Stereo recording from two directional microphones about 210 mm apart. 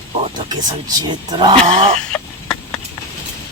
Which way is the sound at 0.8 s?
20° right (ahead or behind).